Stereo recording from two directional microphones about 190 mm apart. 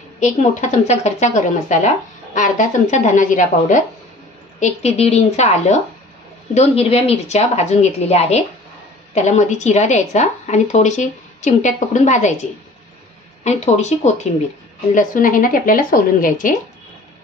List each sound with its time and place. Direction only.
0.2 s a woman's voice: 40° left (ahead or behind)
13.4 s a woman's voice: 35° left (ahead or behind)